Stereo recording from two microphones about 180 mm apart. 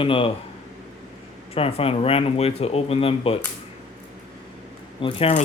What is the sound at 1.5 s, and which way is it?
Speech, 30° left (ahead or behind).